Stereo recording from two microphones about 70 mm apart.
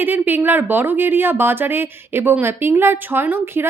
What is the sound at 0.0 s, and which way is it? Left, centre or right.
A woman's voice, right.